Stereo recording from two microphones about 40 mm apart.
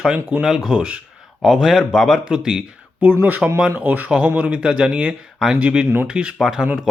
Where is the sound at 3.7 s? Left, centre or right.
Right.